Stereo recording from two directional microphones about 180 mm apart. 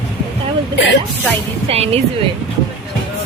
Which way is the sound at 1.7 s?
35° right (ahead or behind).